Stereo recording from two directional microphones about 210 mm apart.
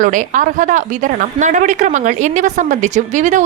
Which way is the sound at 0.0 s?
40° right (ahead or behind).